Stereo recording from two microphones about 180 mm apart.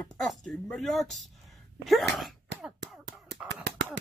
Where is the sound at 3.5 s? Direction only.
65° right (ahead or behind).